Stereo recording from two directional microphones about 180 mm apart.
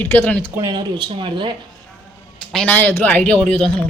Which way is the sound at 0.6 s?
25° right (ahead or behind).